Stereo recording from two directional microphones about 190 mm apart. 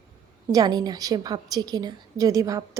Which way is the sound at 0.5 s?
20° right (ahead or behind).